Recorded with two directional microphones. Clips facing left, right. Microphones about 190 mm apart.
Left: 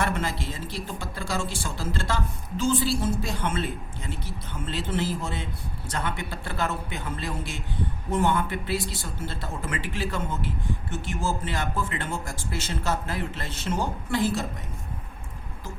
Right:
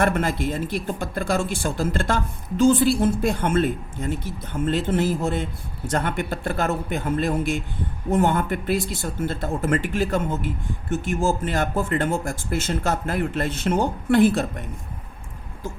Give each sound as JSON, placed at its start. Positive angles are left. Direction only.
{"t": 0.0, "sound": "speech", "side_deg": -55}